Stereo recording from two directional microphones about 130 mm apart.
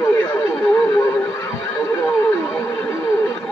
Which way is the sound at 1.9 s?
15° left (ahead or behind).